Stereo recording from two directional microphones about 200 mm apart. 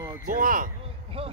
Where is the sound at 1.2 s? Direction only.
25° right (ahead or behind).